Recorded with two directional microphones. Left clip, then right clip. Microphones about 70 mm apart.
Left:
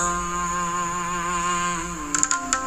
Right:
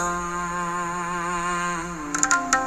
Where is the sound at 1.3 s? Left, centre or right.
Right.